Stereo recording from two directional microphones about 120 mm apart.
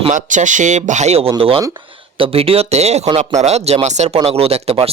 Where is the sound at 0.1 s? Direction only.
90° right; by 4.2 s 70° right (ahead or behind).